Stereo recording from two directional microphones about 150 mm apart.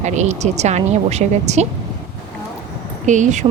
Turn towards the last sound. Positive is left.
turn(degrees=-55)  # may be behind; listen again after turning